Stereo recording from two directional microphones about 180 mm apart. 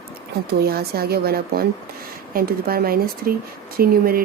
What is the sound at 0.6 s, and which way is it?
Speech, 60° right (ahead or behind).